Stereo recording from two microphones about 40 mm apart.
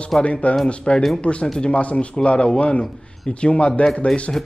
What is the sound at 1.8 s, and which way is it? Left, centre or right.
Speech, left.